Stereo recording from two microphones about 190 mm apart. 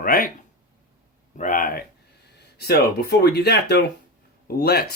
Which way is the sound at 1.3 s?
45° left (ahead or behind).